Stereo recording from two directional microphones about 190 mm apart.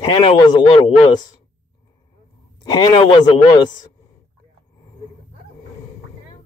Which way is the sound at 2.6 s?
20° left (ahead or behind).